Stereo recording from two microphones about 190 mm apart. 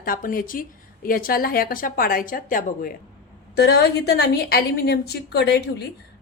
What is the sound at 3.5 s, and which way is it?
Speech, 60° left (ahead or behind).